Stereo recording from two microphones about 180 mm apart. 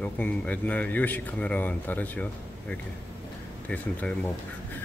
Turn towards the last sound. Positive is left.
turn(degrees=10)  # may be behind; listen again after turning